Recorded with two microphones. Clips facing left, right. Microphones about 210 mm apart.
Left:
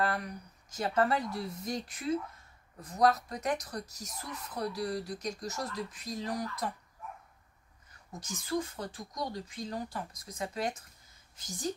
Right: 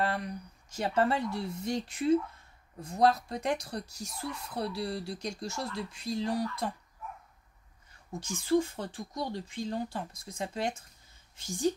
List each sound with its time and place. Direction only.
0.7 s speech: 30° right (ahead or behind)
8.1 s speech: 30° right (ahead or behind)